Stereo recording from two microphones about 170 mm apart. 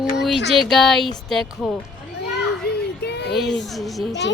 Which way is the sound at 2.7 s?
75° left (ahead or behind).